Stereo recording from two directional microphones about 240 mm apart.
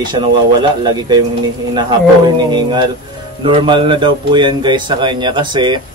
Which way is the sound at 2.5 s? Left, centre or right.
Centre.